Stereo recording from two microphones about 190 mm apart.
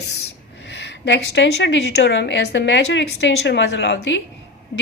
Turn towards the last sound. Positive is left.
turn(degrees=70)  # may be behind; listen again after turning